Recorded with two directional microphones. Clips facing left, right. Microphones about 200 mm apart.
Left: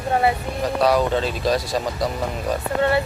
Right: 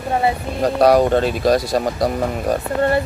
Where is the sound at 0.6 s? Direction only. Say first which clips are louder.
Right 5 dB; 50° right (ahead or behind).